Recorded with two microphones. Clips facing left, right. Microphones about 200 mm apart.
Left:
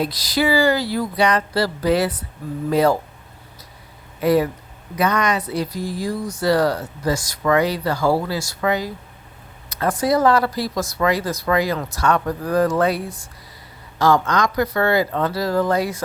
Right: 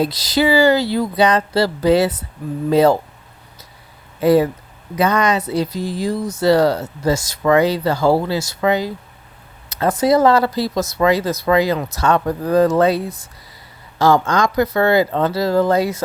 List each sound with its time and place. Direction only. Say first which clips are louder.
0.0 s speech: right 4 dB; 25° right (ahead or behind)
4.2 s speech: right 4 dB; 30° right (ahead or behind)